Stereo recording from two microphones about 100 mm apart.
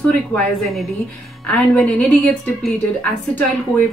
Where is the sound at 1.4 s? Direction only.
10° left (ahead or behind).